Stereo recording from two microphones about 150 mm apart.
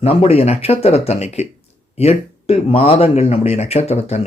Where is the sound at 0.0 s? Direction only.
40° left (ahead or behind).